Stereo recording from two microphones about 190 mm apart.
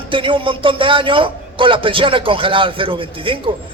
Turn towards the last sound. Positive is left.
turn(degrees=-25)  # may be behind; listen again after turning